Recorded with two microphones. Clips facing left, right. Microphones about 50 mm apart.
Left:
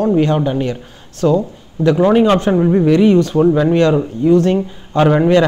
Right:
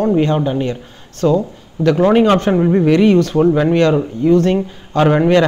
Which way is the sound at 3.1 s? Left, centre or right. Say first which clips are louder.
Even; centre.